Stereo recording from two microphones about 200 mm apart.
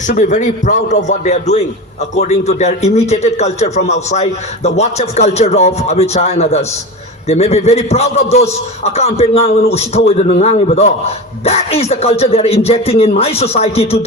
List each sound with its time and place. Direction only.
0.1 s a man's voice: 40° left (ahead or behind)